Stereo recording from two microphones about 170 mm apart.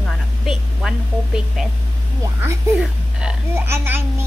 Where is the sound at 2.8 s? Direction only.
5° right (ahead or behind).